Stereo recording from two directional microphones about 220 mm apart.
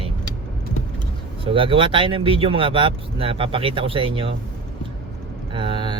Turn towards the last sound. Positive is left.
turn(degrees=-20)  # may be behind; listen again after turning